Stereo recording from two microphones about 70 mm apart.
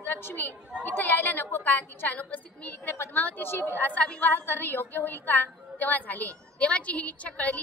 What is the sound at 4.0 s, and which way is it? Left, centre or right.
A woman's voice, left.